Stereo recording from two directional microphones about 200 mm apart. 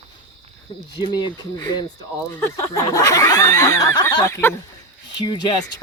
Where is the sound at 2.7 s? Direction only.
15° left (ahead or behind).